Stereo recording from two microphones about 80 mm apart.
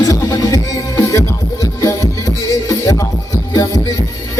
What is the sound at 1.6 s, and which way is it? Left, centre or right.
Music, left.